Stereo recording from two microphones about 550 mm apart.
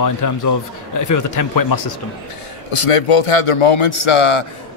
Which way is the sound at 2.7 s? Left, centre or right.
Left.